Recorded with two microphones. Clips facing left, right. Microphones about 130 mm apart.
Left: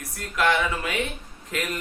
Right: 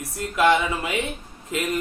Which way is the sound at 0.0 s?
25° right (ahead or behind).